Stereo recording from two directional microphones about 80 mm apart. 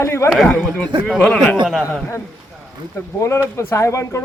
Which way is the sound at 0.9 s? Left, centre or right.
Right.